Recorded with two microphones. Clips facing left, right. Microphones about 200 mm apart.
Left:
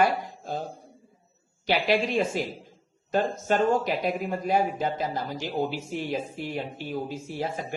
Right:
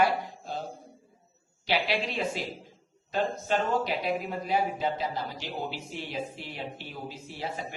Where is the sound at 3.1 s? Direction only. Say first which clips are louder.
Left 4 dB; 45° left (ahead or behind).